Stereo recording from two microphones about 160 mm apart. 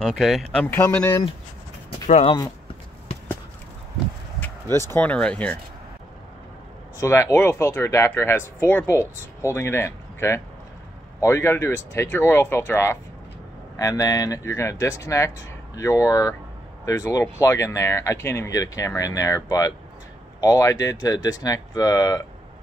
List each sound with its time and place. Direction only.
0.0 s speech: centre (ahead or behind)
2.0 s speech: 45° left (ahead or behind)
4.9 s speech: 10° left (ahead or behind)
7.0 s speech: 15° left (ahead or behind)